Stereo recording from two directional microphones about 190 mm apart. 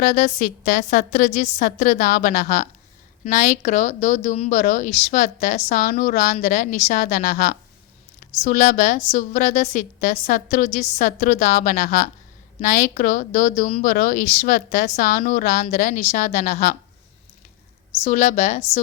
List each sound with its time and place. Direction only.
0.0 s a woman's voice: 40° left (ahead or behind)
18.0 s a woman's voice: 40° left (ahead or behind)